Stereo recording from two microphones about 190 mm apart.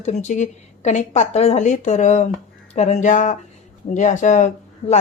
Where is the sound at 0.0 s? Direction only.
35° left (ahead or behind).